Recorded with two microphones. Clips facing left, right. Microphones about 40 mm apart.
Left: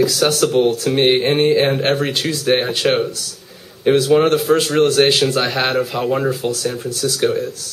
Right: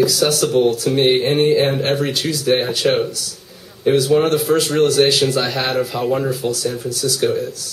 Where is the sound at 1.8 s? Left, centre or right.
Left.